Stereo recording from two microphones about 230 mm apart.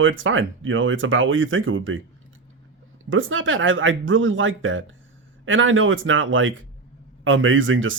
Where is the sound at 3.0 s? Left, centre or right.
Right.